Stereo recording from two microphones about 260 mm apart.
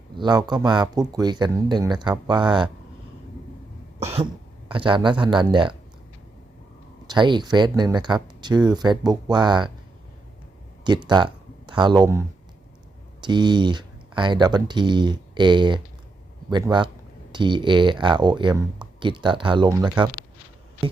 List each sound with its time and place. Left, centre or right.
0.2 s speech: centre
4.0 s cough: right
4.7 s speech: centre
7.1 s speech: centre
10.8 s speech: centre
13.2 s speech: centre